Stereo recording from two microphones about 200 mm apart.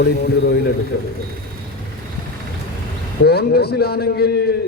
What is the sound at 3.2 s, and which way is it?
Speech, 55° left (ahead or behind).